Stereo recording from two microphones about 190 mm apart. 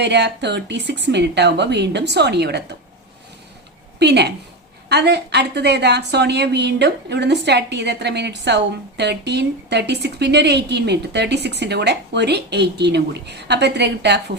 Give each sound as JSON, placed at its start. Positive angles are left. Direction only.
{"t": 0.0, "sound": "a woman's voice", "side_deg": -65}
{"t": 4.0, "sound": "a woman's voice", "side_deg": -60}